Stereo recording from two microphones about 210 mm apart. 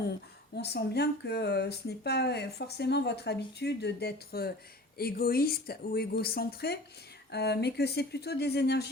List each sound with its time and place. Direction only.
0.5 s speech: 50° left (ahead or behind)